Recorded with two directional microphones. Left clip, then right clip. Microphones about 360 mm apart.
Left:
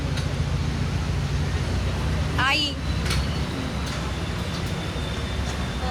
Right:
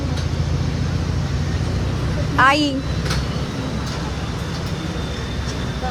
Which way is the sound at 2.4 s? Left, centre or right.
Right.